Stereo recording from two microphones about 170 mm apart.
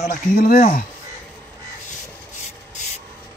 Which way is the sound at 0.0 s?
55° left (ahead or behind).